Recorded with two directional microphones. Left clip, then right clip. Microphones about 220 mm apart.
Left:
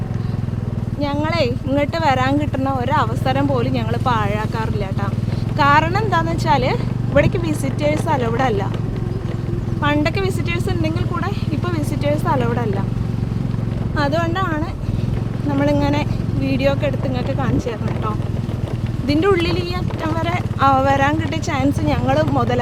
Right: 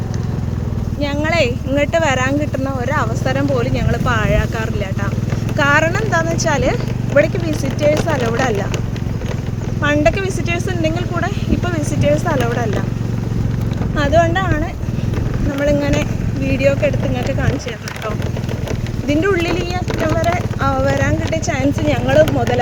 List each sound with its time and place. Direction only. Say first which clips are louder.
1.0 s speech: right 3 dB; centre (ahead or behind)
5.5 s speech: even; 5° left (ahead or behind)
9.8 s speech: right 4 dB; 5° left (ahead or behind)
13.9 s speech: right 6 dB; 5° left (ahead or behind)
15.5 s vehicle: right 2 dB; 10° left (ahead or behind)
16.6 s speech: right 5 dB; 10° left (ahead or behind)
19.0 s speech: right 1 dB; 10° left (ahead or behind)
21.4 s speech: right 1 dB; 5° left (ahead or behind)